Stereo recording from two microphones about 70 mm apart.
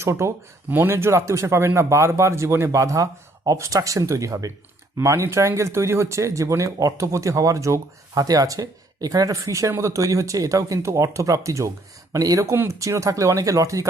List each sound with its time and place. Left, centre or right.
0.0 s speech: right
8.1 s speech: right
12.5 s speech: right